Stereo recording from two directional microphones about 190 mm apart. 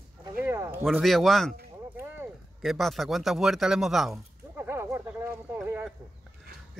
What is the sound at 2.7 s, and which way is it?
Speech, centre (ahead or behind).